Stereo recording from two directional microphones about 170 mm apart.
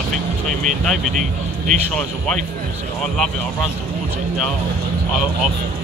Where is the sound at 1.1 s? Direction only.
45° right (ahead or behind).